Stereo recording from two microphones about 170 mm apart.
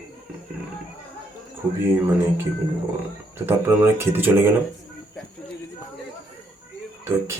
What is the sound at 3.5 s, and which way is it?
Speech, 15° right (ahead or behind).